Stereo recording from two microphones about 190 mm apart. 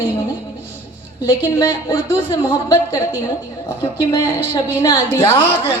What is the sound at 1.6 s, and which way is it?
A woman's voice, 15° left (ahead or behind).